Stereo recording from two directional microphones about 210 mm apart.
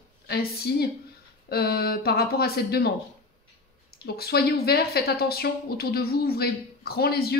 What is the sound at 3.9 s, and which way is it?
Speech, 50° left (ahead or behind).